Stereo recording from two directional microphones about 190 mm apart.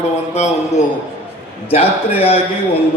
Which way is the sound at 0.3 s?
35° left (ahead or behind).